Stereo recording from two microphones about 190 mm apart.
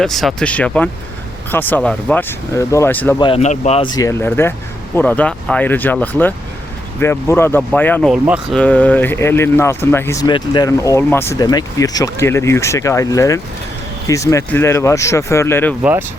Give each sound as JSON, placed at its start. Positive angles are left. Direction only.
{"t": 0.0, "sound": "speech", "side_deg": 0}
{"t": 3.2, "sound": "speech", "side_deg": 30}
{"t": 15.8, "sound": "speech", "side_deg": -10}